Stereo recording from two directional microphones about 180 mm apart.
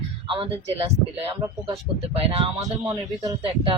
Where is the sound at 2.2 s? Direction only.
30° right (ahead or behind).